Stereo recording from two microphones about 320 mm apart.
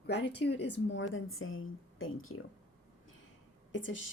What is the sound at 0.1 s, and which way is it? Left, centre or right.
A woman's voice, left.